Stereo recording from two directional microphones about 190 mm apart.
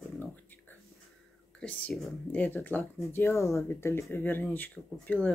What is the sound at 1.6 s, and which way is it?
Speech, 5° left (ahead or behind).